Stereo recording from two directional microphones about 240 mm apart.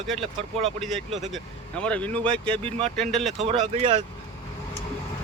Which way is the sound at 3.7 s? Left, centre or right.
Right.